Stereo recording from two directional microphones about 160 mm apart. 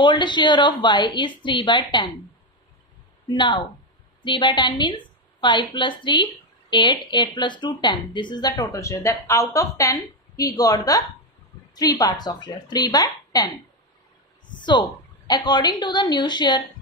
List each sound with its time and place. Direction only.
0.0 s a woman's voice: 30° left (ahead or behind)
3.3 s a woman's voice: 30° left (ahead or behind)
14.5 s a woman's voice: 30° left (ahead or behind)